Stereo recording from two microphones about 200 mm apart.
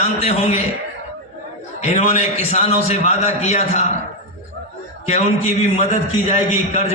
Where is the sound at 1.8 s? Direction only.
35° left (ahead or behind).